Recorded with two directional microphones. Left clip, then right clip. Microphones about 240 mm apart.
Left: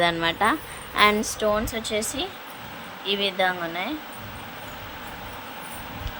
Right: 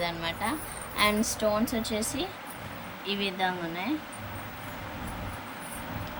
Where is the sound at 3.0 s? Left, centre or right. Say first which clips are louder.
Left 7 dB; centre.